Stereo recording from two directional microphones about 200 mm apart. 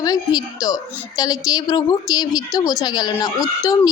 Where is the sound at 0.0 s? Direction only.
20° left (ahead or behind).